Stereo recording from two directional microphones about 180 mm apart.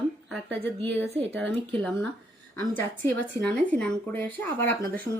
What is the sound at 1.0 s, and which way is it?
Speech, 35° right (ahead or behind).